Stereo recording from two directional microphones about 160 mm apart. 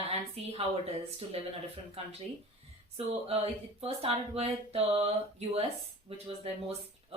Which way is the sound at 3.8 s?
40° right (ahead or behind).